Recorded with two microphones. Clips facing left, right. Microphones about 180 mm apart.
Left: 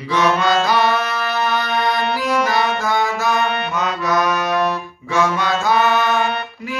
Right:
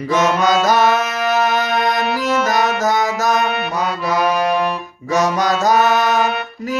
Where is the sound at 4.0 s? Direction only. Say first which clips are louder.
Right 2 dB; 30° right (ahead or behind).